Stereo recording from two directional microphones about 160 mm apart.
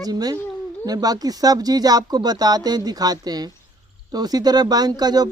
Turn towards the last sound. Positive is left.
turn(degrees=-25)  # may be behind; listen again after turning